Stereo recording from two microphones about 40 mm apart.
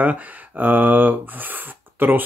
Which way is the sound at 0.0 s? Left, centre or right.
Right.